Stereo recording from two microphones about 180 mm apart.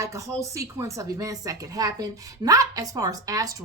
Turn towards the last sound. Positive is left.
turn(degrees=-20)  # may be behind; listen again after turning